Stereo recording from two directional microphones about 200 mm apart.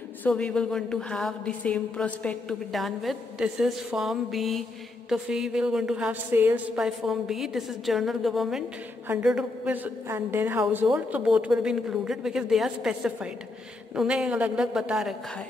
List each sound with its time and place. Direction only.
0.2 s a woman's voice: 5° left (ahead or behind)